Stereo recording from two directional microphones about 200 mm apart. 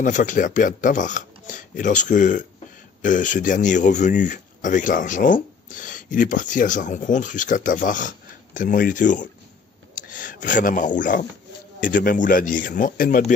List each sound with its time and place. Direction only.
0.0 s speech: 40° left (ahead or behind)